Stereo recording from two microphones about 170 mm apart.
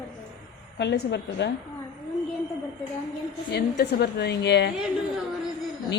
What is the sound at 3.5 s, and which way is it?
A woman's voice, 75° left (ahead or behind).